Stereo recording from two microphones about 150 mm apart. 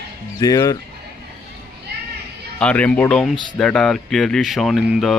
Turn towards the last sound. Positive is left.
turn(degrees=0)  # may be behind; listen again after turning